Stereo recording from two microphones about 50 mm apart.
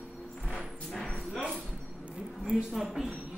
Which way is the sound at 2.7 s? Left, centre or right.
Centre.